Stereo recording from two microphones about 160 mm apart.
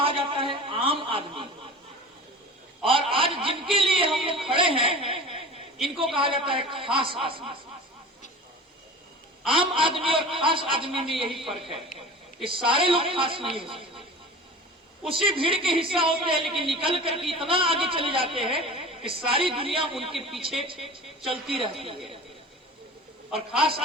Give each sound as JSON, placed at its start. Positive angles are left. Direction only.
{"t": 0.0, "sound": "a sound", "side_deg": -35}
{"t": 2.8, "sound": "a man's voice", "side_deg": -35}
{"t": 9.5, "sound": "a man's voice", "side_deg": -35}
{"t": 11.3, "sound": "a man's voice", "side_deg": 0}
{"t": 11.7, "sound": "a man's voice", "side_deg": -35}
{"t": 15.1, "sound": "a man's voice", "side_deg": -35}
{"t": 20.1, "sound": "a man's voice", "side_deg": 0}
{"t": 20.9, "sound": "a man's voice", "side_deg": -35}